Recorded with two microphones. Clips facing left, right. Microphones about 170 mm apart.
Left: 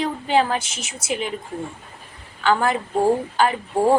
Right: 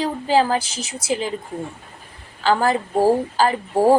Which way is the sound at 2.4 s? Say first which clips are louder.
Right 1 dB; 35° right (ahead or behind).